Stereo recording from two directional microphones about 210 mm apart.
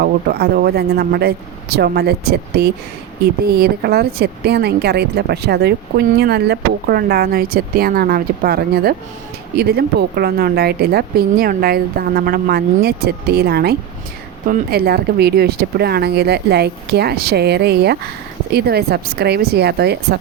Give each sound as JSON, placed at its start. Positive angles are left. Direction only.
{"t": 0.0, "sound": "a woman's voice", "side_deg": -45}